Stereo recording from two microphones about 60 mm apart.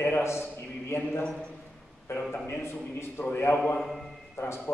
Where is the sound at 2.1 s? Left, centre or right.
Left.